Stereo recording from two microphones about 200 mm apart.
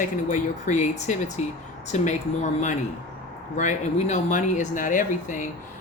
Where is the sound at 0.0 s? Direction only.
40° left (ahead or behind).